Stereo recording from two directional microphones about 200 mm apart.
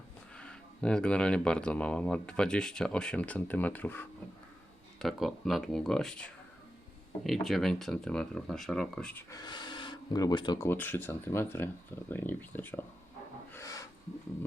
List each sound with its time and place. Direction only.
0.3 s speech: 5° left (ahead or behind)
9.3 s speech: 20° left (ahead or behind)
10.7 s speech: 10° left (ahead or behind)
13.5 s filing: 15° left (ahead or behind)